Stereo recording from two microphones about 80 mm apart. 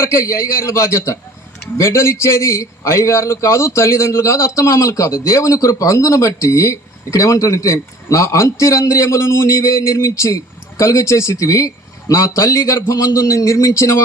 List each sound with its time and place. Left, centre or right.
0.0 s a man's voice: left